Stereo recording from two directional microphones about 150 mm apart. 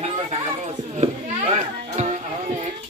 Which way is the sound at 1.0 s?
55° right (ahead or behind).